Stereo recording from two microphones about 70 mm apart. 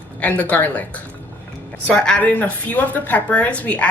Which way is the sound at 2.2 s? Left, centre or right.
Left.